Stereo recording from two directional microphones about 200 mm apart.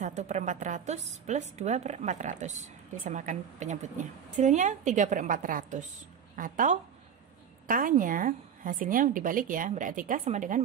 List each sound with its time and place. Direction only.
0.0 s a woman's voice: 35° right (ahead or behind)